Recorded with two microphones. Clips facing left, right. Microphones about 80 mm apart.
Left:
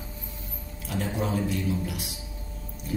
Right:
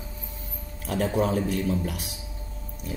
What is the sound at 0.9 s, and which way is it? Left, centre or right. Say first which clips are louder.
A man's voice: right 5 dB; right.